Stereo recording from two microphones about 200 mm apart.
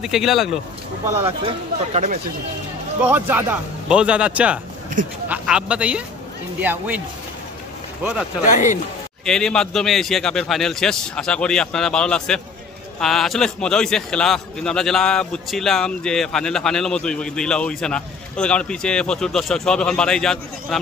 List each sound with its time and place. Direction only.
0.0 s a man's voice: centre (ahead or behind)
3.0 s a man's voice: 10° right (ahead or behind)
8.0 s a man's voice: 5° right (ahead or behind)
8.5 s speech: 40° left (ahead or behind)
9.2 s a man's voice: 5° left (ahead or behind)